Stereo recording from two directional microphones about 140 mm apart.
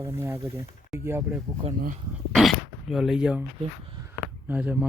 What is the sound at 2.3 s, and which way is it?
Throat clearing, centre (ahead or behind).